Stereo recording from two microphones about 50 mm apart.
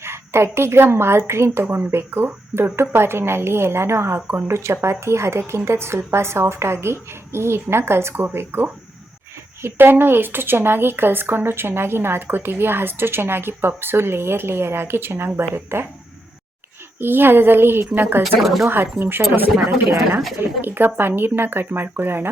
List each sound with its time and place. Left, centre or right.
0.0 s a woman's voice: right
17.0 s a woman's voice: right
18.2 s speech: centre
18.7 s a woman's voice: right
20.4 s a woman's voice: right